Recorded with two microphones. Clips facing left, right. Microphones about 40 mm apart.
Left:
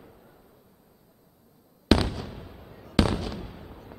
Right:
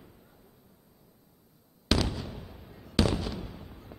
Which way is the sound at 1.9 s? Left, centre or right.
Centre.